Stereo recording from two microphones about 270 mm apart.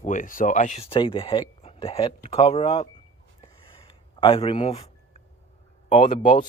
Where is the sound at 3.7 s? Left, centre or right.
Centre.